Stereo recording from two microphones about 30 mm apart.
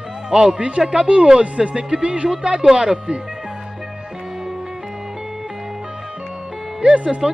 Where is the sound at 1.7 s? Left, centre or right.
Right.